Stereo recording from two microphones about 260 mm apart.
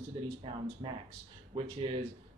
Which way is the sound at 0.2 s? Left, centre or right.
Centre.